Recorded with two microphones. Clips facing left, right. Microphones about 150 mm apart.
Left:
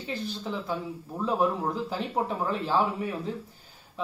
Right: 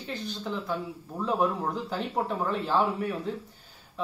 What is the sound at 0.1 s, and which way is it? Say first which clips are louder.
Speech: left 1 dB; centre (ahead or behind).